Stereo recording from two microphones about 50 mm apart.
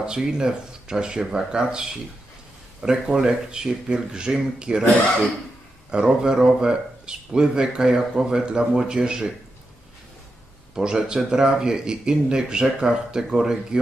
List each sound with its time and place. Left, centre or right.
0.0 s speech: centre
5.9 s speech: centre
10.7 s speech: centre